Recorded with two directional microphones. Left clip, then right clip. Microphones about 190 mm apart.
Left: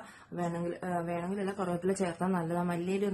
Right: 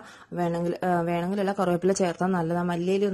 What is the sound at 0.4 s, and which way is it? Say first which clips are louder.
A woman's voice: right 8 dB; 40° right (ahead or behind).